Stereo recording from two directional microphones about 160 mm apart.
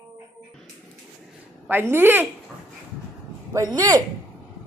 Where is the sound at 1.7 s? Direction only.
15° right (ahead or behind).